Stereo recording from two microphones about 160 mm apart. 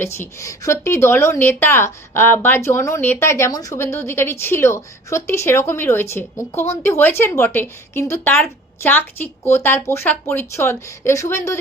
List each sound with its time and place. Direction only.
0.0 s a woman's voice: 15° left (ahead or behind)